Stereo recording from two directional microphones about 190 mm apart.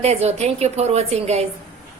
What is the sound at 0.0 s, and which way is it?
A woman's voice, 35° right (ahead or behind).